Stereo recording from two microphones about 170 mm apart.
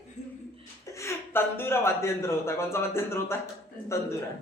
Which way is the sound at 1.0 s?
15° left (ahead or behind).